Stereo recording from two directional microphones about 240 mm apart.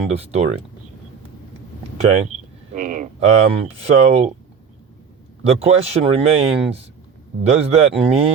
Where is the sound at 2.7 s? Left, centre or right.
Right.